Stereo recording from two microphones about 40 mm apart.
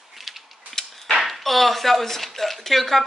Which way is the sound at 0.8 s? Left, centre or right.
Centre.